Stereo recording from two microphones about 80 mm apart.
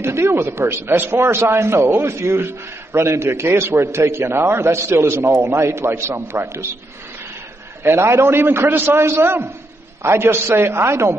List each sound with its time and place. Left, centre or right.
0.0 s a man's voice: right
7.8 s a man's voice: right